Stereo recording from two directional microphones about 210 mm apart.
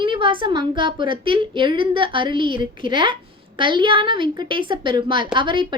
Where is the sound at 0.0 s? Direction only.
25° right (ahead or behind).